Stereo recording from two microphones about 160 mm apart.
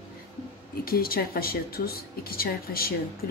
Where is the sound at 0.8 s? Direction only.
70° left (ahead or behind).